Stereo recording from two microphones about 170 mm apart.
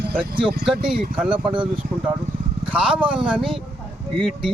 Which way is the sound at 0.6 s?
5° right (ahead or behind).